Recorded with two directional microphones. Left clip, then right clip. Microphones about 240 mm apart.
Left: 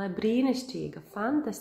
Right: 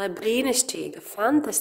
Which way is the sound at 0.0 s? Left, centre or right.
Right.